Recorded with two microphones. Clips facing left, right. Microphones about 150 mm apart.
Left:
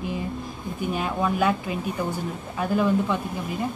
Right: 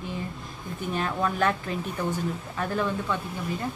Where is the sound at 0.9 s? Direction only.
10° left (ahead or behind).